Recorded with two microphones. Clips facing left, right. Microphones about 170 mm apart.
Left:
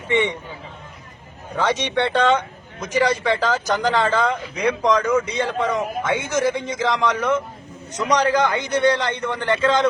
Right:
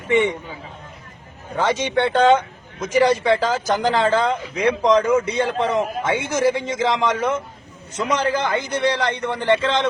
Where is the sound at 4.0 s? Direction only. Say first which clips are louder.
Right 1 dB; 25° right (ahead or behind).